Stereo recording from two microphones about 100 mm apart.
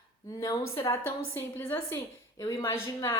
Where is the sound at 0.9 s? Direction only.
20° left (ahead or behind).